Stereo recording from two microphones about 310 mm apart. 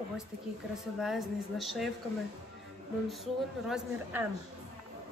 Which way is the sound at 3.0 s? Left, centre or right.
Centre.